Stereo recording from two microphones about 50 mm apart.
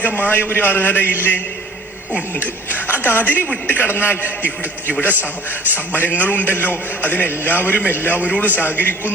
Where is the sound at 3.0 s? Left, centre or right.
Left.